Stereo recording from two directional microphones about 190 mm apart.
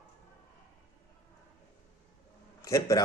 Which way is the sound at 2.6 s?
15° left (ahead or behind).